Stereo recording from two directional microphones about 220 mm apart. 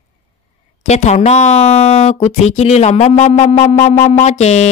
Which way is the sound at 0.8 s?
30° left (ahead or behind).